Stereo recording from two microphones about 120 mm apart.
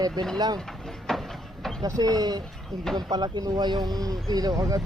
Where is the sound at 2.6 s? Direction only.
Centre (ahead or behind).